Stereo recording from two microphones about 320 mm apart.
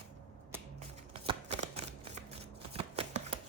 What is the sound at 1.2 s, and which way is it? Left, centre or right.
Shuffling cards, centre.